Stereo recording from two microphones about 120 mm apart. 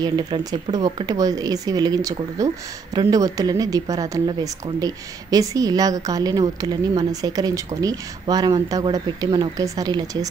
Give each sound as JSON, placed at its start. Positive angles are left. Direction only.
{"t": 0.0, "sound": "a woman's voice", "side_deg": -35}